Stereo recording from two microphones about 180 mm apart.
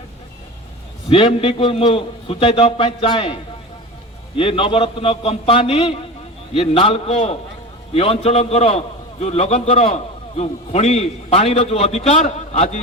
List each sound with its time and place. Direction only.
1.1 s a man's voice: 30° left (ahead or behind)
4.4 s a man's voice: 30° left (ahead or behind)